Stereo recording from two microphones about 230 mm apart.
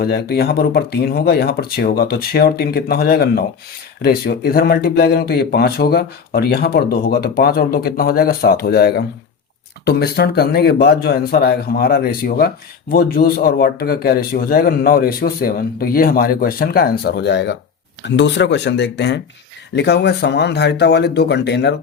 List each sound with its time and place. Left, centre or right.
0.0 s speech: left